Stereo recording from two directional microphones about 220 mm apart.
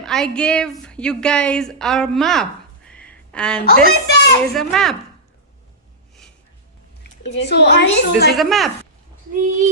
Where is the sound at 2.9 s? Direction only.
5° left (ahead or behind).